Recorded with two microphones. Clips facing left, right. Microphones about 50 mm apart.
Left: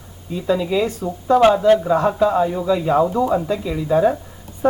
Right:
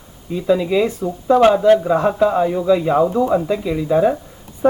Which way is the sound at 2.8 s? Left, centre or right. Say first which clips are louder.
Right 1 dB; centre.